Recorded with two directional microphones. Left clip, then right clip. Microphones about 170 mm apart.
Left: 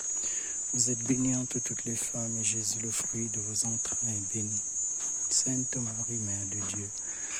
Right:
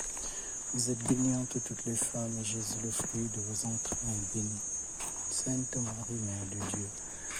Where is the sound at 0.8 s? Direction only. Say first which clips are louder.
Left 2 dB; 50° left (ahead or behind).